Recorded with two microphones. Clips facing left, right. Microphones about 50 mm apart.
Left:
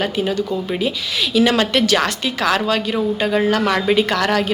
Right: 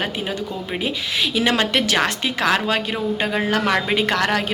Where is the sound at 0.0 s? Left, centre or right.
Right.